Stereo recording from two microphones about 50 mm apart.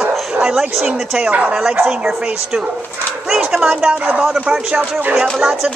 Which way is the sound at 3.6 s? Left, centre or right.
Right.